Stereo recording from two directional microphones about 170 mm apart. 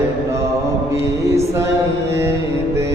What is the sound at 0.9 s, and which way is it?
Music, 15° right (ahead or behind).